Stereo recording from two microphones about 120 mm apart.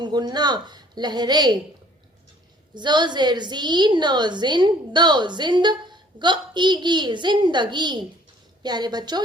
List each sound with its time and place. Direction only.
0.0 s a woman's voice: 35° right (ahead or behind)
2.7 s a woman's voice: 40° right (ahead or behind)